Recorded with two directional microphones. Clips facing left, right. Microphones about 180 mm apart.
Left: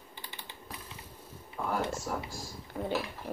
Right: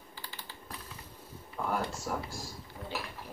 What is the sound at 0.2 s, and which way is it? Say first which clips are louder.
Typing: even; 20° left (ahead or behind).